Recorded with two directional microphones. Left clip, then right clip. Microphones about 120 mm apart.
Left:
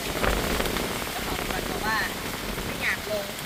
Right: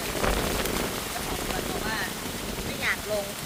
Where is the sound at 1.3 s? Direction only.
Centre (ahead or behind).